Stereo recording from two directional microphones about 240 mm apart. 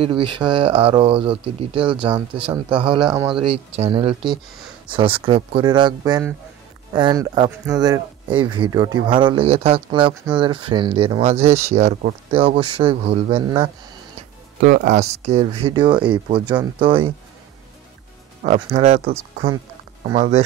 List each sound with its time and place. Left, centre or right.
0.0 s speech: right
3.1 s speech: centre
3.3 s speech: right
14.6 s speech: right
18.4 s speech: right